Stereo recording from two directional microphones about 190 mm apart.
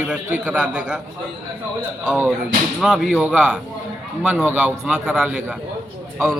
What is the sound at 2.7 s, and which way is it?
A man's voice, centre (ahead or behind).